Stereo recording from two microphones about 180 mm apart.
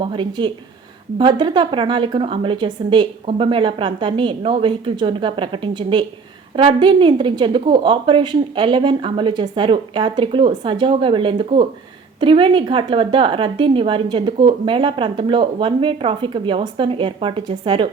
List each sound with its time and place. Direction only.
0.0 s a woman's voice: 30° right (ahead or behind)